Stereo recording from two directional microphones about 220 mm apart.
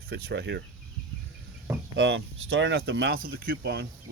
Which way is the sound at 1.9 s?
55° right (ahead or behind).